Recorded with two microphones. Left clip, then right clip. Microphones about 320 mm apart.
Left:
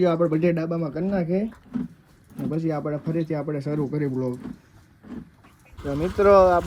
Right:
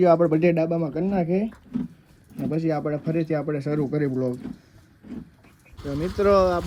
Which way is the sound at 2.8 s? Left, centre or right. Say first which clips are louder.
Right 1 dB; right.